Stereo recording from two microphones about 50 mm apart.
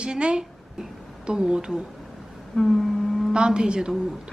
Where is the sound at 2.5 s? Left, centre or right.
Centre.